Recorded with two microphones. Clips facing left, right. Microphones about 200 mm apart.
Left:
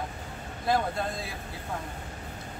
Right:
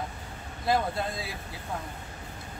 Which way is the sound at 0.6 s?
5° right (ahead or behind).